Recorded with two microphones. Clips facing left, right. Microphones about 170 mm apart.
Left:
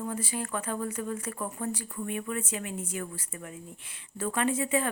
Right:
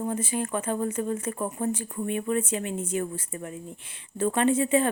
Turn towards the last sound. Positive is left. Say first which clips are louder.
# right 5 dB
turn(degrees=-25)  # may be behind; listen again after turning